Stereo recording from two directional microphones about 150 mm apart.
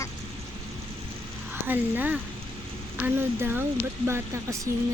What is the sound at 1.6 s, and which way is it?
Speech, 10° right (ahead or behind).